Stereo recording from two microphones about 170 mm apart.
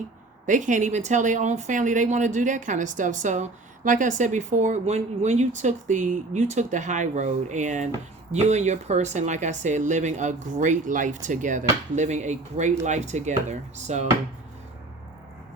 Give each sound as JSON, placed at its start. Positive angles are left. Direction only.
{"t": 0.4, "sound": "a woman's voice", "side_deg": -50}